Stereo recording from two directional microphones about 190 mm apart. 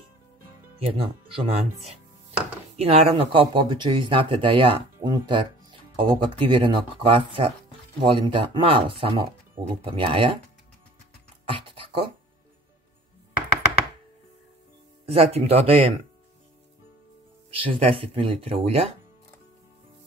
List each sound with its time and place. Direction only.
0.7 s speech: 30° right (ahead or behind)
2.3 s chopping: 5° right (ahead or behind)
2.8 s speech: 30° right (ahead or behind)
11.4 s a sound: 25° right (ahead or behind)
15.0 s speech: 30° right (ahead or behind)
17.5 s speech: 30° right (ahead or behind)